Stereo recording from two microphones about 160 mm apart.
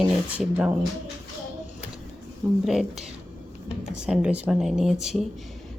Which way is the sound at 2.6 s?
Centre (ahead or behind).